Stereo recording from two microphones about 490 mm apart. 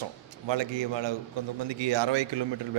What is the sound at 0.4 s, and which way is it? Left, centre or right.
A man's voice, right.